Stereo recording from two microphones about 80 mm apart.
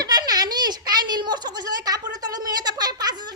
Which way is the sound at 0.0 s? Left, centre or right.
Right.